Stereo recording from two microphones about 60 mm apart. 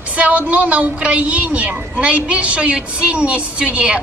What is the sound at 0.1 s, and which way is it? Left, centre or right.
A woman's voice, right.